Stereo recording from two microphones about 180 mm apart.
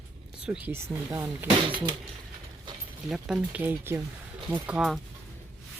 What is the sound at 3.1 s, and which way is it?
Speech, centre (ahead or behind).